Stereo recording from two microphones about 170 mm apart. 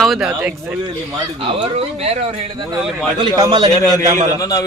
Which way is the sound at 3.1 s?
25° right (ahead or behind).